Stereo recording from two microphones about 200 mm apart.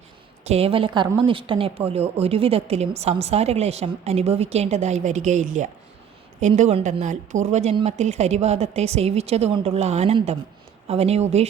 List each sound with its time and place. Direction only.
0.4 s a woman's voice: 30° right (ahead or behind)